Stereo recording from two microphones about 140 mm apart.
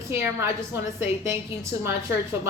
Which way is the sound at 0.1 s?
20° right (ahead or behind).